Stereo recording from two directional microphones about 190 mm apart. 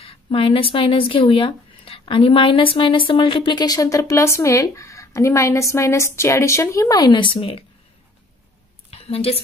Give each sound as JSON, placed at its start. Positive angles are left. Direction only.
{"t": 0.0, "sound": "speech", "side_deg": 30}
{"t": 8.9, "sound": "a woman's voice", "side_deg": 30}